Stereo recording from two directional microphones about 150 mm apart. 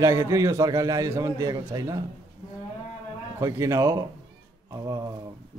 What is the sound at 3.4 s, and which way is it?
A man's voice, 20° right (ahead or behind).